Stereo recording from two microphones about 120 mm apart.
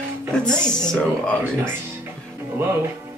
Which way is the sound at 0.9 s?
10° left (ahead or behind).